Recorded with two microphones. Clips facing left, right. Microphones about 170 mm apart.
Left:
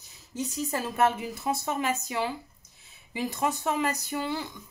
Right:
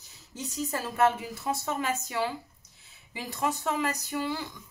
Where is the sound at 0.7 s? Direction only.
20° left (ahead or behind).